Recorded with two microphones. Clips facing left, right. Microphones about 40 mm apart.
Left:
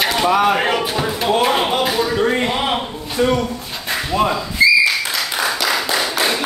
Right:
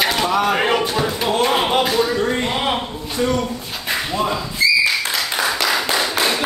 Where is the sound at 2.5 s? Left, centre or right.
Centre.